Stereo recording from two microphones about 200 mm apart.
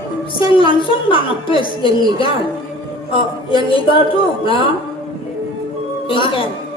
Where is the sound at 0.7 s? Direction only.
25° left (ahead or behind).